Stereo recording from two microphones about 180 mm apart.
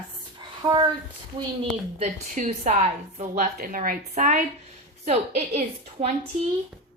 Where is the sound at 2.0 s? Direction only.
40° right (ahead or behind).